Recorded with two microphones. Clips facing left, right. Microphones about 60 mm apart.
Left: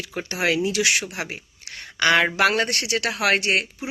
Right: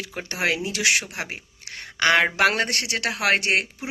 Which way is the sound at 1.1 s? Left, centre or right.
Right.